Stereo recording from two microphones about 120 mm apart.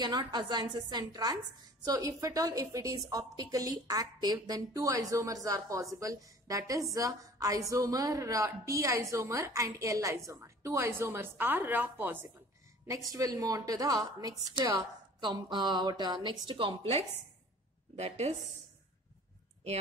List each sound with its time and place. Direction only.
0.0 s a woman's voice: 40° right (ahead or behind); by 12.3 s 15° right (ahead or behind)
12.8 s a woman's voice: 30° right (ahead or behind); by 17.0 s 50° right (ahead or behind)
17.9 s speech: 65° right (ahead or behind)